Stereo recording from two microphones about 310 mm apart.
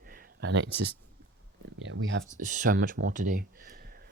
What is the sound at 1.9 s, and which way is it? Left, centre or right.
Speech, right.